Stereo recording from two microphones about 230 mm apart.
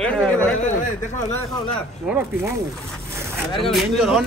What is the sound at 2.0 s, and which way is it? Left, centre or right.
Speech, centre.